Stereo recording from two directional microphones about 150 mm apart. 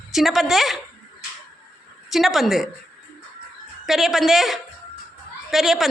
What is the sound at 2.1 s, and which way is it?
Speech, centre (ahead or behind).